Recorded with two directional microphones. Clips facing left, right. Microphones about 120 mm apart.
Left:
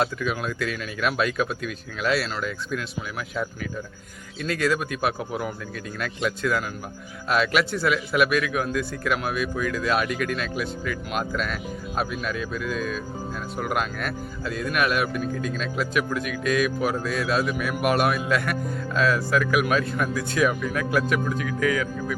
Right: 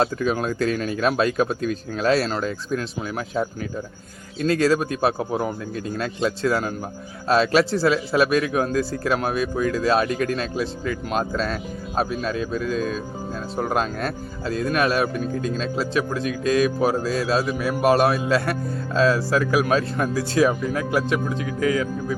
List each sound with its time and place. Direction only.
0.0 s speech: 35° right (ahead or behind)